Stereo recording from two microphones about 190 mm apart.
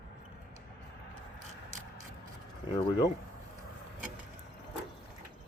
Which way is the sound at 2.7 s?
20° left (ahead or behind).